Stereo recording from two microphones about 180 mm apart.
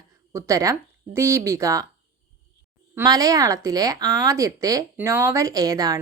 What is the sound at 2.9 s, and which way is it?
A woman's voice, 20° right (ahead or behind).